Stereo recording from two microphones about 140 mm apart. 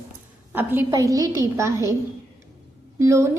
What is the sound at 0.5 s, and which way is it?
A woman's voice, 15° right (ahead or behind).